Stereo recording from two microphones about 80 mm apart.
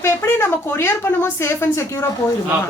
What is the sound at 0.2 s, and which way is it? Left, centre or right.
Speech, left.